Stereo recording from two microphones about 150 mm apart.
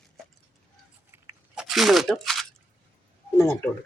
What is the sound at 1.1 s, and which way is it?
Crunch, 15° right (ahead or behind).